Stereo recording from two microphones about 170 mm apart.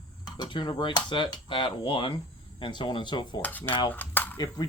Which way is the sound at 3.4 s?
10° left (ahead or behind).